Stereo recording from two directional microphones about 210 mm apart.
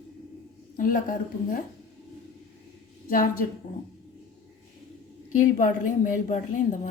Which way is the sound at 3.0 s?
40° left (ahead or behind).